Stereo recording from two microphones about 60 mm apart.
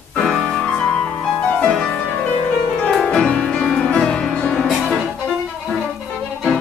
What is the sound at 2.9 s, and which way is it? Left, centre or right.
Music, centre.